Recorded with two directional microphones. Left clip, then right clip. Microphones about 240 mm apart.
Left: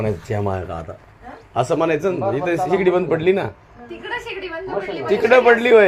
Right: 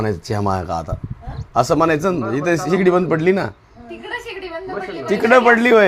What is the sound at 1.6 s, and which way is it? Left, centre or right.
Speech, right.